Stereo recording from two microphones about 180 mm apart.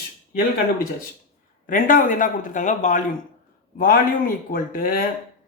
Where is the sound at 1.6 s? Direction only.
50° left (ahead or behind).